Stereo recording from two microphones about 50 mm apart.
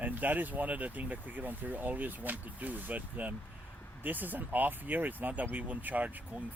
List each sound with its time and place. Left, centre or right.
0.0 s speech: right